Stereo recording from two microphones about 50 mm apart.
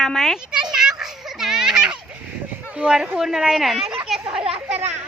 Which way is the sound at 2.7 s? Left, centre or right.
Right.